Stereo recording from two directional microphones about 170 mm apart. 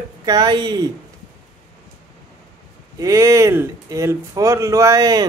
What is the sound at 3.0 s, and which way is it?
Speech, 20° right (ahead or behind).